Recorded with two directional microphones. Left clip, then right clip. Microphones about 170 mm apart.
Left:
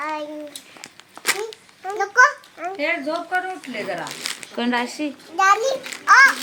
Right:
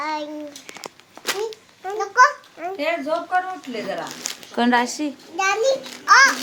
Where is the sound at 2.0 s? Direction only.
5° right (ahead or behind).